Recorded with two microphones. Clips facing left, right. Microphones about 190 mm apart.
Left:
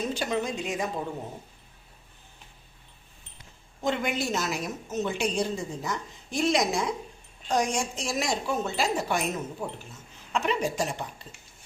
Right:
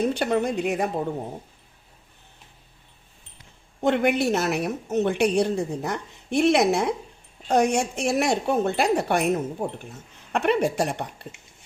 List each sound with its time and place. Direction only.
0.0 s a woman's voice: 60° right (ahead or behind)
3.8 s a woman's voice: 60° right (ahead or behind)